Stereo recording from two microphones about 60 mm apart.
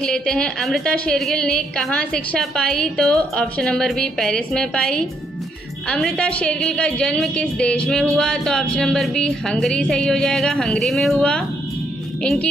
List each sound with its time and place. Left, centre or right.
0.0 s a woman's voice: centre
1.1 s a woman's voice: centre
12.2 s speech: centre